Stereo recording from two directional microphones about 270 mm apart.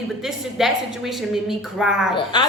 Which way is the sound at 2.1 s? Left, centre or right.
Centre.